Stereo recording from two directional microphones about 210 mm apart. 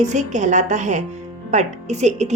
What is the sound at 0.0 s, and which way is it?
A woman's voice, 35° right (ahead or behind).